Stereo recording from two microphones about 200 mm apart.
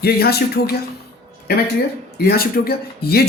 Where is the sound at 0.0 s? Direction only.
50° left (ahead or behind).